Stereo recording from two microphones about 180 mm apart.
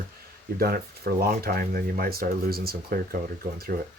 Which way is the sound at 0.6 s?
60° right (ahead or behind).